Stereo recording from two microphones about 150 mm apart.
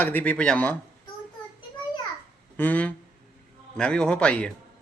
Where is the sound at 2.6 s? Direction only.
10° left (ahead or behind).